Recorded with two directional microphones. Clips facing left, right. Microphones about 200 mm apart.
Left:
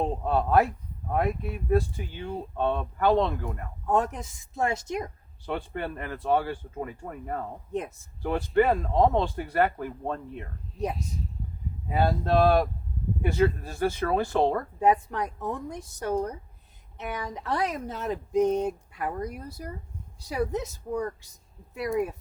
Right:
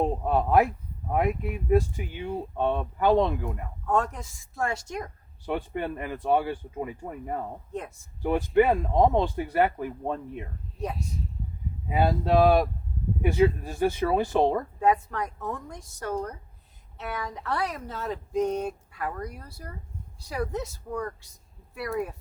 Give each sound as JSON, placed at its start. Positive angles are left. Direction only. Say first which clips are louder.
{"t": 0.0, "sound": "speech", "louder": "right 1 dB", "side_deg": -15}
{"t": 3.8, "sound": "speech", "louder": "left 1 dB", "side_deg": 20}
{"t": 5.5, "sound": "speech", "louder": "right 2 dB", "side_deg": -15}
{"t": 7.7, "sound": "speech", "louder": "left 8 dB", "side_deg": 20}
{"t": 8.2, "sound": "speech", "louder": "right 2 dB", "side_deg": -15}
{"t": 11.9, "sound": "speech", "louder": "right 1 dB", "side_deg": -15}
{"t": 14.8, "sound": "a woman's voice", "louder": "left 3 dB", "side_deg": 20}